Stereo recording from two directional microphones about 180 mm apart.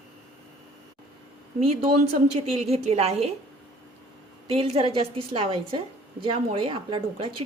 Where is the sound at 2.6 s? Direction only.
35° right (ahead or behind).